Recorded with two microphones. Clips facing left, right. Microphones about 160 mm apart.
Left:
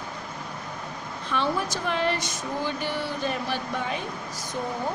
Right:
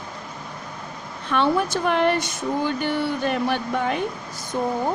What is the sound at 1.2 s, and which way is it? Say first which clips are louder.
A woman's voice: right 6 dB; 60° right (ahead or behind).